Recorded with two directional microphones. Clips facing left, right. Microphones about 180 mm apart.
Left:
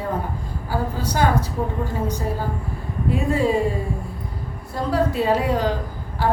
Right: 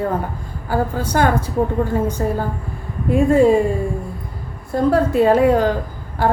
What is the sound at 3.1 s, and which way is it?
Speech, 50° right (ahead or behind).